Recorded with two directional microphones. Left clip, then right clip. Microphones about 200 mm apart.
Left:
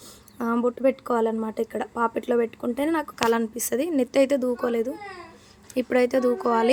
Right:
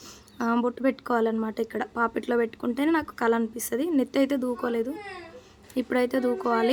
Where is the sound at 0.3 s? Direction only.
5° left (ahead or behind).